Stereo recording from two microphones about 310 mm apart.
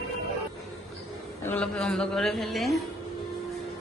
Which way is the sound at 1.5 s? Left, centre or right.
Centre.